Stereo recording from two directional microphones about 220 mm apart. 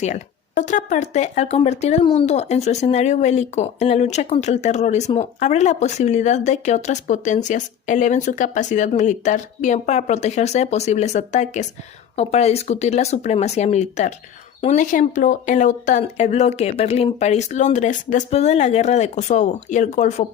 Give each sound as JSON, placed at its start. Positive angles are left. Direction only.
{"t": 0.6, "sound": "speech", "side_deg": 35}